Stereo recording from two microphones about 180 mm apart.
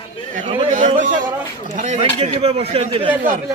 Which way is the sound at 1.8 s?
35° right (ahead or behind).